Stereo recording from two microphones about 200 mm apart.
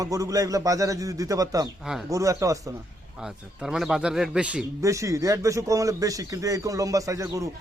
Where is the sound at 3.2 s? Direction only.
5° right (ahead or behind).